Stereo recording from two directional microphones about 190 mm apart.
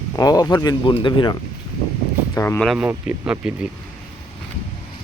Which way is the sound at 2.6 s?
5° right (ahead or behind).